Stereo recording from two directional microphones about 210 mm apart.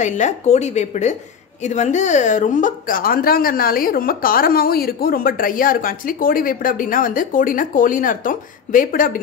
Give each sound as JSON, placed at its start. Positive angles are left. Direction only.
{"t": 0.0, "sound": "a woman's voice", "side_deg": 35}